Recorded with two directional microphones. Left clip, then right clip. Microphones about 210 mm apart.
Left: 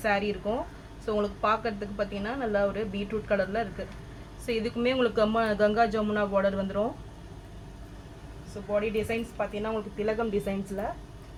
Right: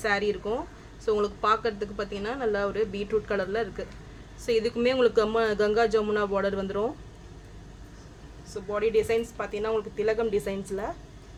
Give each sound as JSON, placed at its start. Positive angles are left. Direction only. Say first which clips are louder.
{"t": 0.0, "sound": "speech", "louder": "right 1 dB", "side_deg": -30}
{"t": 8.7, "sound": "speech", "louder": "right 4 dB", "side_deg": -40}